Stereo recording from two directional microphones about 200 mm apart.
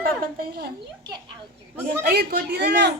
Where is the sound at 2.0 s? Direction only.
50° right (ahead or behind).